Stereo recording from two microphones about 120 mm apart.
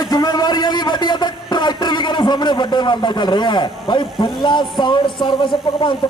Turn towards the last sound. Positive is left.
turn(degrees=45)  # may be behind; listen again after turning